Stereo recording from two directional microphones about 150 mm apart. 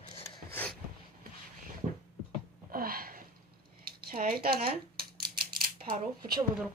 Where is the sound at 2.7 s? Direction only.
75° right (ahead or behind).